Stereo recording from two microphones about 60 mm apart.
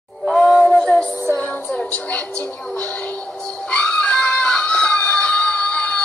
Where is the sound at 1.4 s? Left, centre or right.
Left.